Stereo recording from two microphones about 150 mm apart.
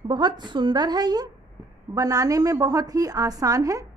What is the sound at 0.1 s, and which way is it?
A woman's voice, 30° right (ahead or behind).